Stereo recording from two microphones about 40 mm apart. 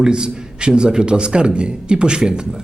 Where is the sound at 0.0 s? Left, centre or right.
Centre.